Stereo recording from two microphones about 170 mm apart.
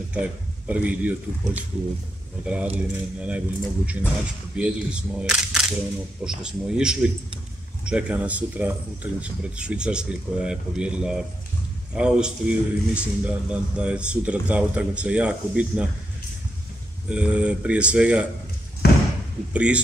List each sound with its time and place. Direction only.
0.1 s speech: 5° right (ahead or behind)
2.4 s a man's voice: 5° right (ahead or behind)
17.1 s a man's voice: 5° right (ahead or behind)
18.8 s slam: 70° left (ahead or behind)
19.5 s a man's voice: 5° right (ahead or behind)